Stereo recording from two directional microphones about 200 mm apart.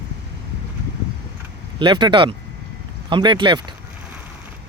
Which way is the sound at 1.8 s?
25° right (ahead or behind).